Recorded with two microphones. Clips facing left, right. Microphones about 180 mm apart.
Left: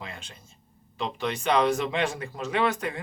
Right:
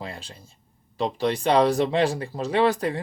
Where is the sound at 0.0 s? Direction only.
35° right (ahead or behind).